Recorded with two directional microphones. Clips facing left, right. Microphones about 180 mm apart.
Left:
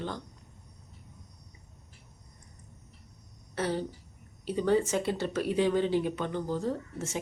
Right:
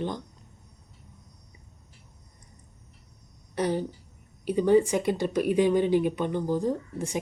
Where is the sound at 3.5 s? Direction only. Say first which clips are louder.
Right 4 dB; 15° right (ahead or behind).